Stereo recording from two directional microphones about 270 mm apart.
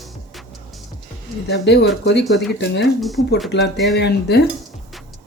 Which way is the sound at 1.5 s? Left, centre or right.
Left.